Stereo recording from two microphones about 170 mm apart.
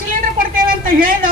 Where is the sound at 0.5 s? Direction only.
55° right (ahead or behind).